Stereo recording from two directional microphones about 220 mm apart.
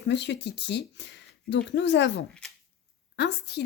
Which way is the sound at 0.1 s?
50° left (ahead or behind).